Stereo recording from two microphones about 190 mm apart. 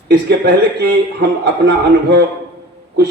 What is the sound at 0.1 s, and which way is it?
A man's voice, 60° right (ahead or behind).